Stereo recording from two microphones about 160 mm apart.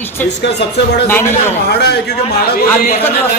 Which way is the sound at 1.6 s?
90° left.